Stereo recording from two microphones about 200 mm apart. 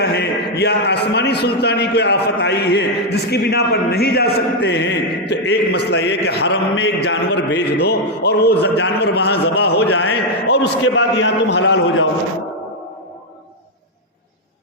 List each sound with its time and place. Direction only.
0.0 s a man's voice: 55° left (ahead or behind)